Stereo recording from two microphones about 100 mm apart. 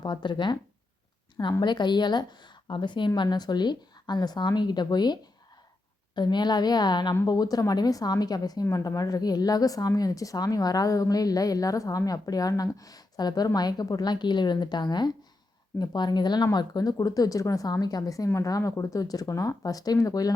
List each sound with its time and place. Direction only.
0.0 s a woman's voice: 50° left (ahead or behind)
1.6 s a woman's voice: 50° left (ahead or behind)